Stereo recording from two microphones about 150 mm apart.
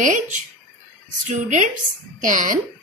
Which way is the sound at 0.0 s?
60° right (ahead or behind).